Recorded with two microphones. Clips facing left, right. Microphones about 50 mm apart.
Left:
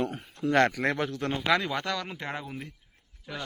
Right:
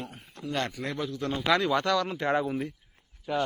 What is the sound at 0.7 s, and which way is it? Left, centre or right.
Speech, left.